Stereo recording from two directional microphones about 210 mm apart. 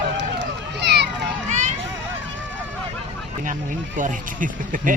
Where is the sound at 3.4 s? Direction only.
40° right (ahead or behind).